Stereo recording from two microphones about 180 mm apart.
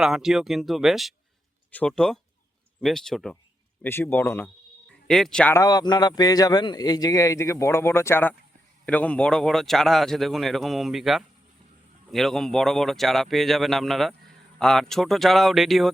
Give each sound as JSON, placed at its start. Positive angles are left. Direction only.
{"t": 0.0, "sound": "a man's voice", "side_deg": 0}
{"t": 5.5, "sound": "a man's voice", "side_deg": 20}